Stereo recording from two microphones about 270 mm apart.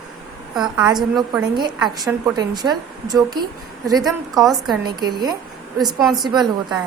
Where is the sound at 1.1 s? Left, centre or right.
Centre.